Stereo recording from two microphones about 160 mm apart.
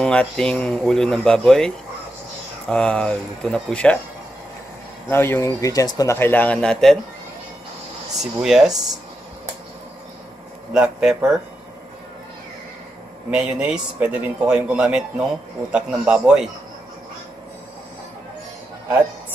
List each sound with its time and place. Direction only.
0.0 s speech: 5° left (ahead or behind)
2.7 s speech: 5° left (ahead or behind)
5.1 s a man's voice: 15° left (ahead or behind)
8.2 s speech: centre (ahead or behind)
10.7 s speech: 5° right (ahead or behind)
13.3 s a man's voice: 5° right (ahead or behind)